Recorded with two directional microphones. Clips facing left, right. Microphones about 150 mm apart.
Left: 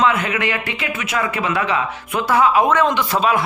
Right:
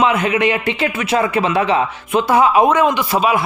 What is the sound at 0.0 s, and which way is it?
Speech, 20° right (ahead or behind).